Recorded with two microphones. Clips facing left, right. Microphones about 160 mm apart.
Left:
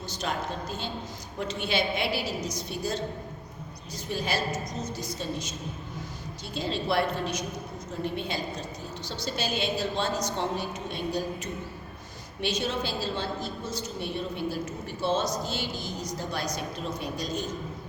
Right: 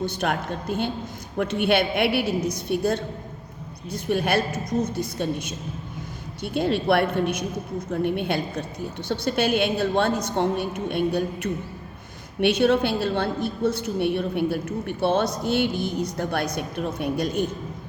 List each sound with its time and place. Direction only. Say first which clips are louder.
0.0 s a woman's voice: right 6 dB; 60° right (ahead or behind)
12.4 s a woman's voice: right 11 dB; 60° right (ahead or behind)